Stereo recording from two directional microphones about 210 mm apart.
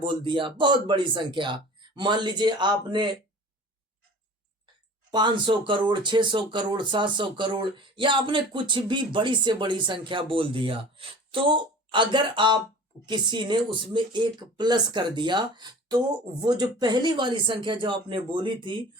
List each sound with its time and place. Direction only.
0.0 s speech: 20° right (ahead or behind)
5.1 s speech: 20° right (ahead or behind)